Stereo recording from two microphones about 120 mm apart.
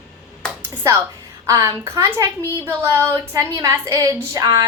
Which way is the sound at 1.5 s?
25° right (ahead or behind).